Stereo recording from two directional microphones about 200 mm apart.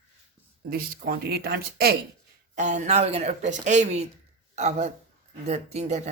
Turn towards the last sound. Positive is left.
turn(degrees=-35)  # may be behind; listen again after turning